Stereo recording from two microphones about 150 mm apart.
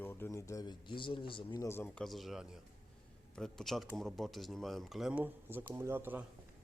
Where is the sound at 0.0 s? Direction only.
15° left (ahead or behind); by 1.6 s 35° left (ahead or behind).